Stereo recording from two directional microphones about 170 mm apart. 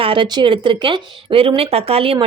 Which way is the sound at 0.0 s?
30° right (ahead or behind).